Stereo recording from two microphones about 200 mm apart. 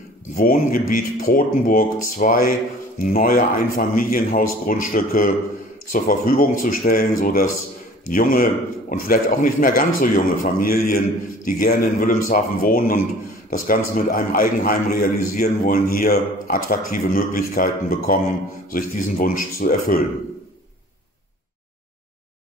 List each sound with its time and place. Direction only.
0.4 s a man's voice: 45° left (ahead or behind)